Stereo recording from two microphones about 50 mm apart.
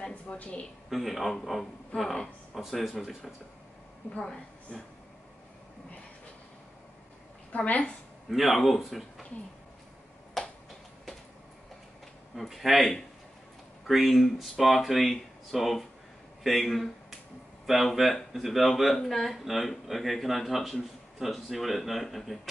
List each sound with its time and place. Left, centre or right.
0.1 s speech: left
0.8 s speech: centre
4.2 s a woman's voice: centre
7.5 s a woman's voice: left
8.3 s speech: centre
10.4 s finger snapping: centre
12.4 s speech: centre